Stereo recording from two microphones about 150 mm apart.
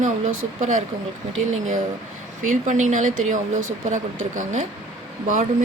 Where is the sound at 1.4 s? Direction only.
55° right (ahead or behind).